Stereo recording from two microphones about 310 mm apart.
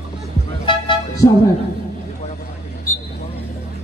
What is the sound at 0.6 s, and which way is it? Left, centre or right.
Music, centre.